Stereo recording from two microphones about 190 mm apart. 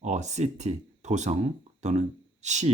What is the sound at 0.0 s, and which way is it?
Speech, 40° right (ahead or behind).